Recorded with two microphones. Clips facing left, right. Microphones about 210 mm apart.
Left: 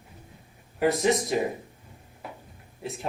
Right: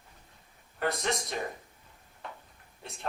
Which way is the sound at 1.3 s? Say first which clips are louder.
Left 9 dB; 10° left (ahead or behind).